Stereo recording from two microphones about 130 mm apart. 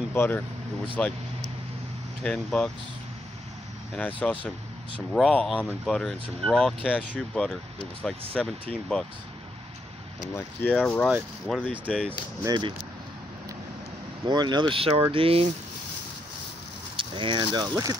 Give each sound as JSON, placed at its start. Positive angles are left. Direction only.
{"t": 0.1, "sound": "speech", "side_deg": 15}
{"t": 2.2, "sound": "speech", "side_deg": 5}
{"t": 3.9, "sound": "speech", "side_deg": 10}
{"t": 10.3, "sound": "speech", "side_deg": 15}
{"t": 12.4, "sound": "speech", "side_deg": -35}
{"t": 14.2, "sound": "speech", "side_deg": -30}
{"t": 16.9, "sound": "speech", "side_deg": -40}